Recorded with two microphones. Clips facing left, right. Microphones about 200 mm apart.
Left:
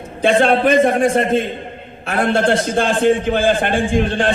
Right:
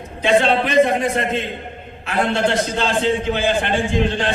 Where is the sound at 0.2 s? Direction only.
50° left (ahead or behind).